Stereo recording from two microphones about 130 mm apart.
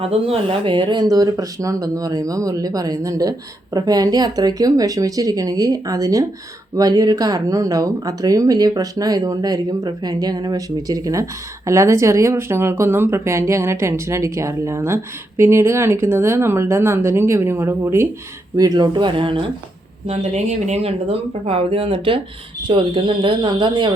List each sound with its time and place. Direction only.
0.0 s speech: 50° right (ahead or behind)
20.1 s speech: 60° right (ahead or behind); by 23.9 s 35° right (ahead or behind)